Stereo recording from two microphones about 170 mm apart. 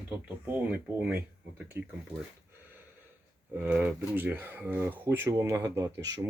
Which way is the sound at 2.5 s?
10° right (ahead or behind).